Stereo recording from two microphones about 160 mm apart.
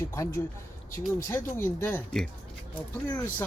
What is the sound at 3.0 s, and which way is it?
Speech, 10° left (ahead or behind).